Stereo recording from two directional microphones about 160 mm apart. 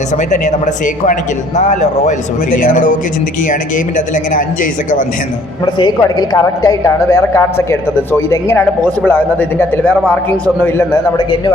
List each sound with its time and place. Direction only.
0.2 s speech: 50° left (ahead or behind)
5.7 s a woman's voice: 25° left (ahead or behind)
11.2 s a man's voice: 30° left (ahead or behind)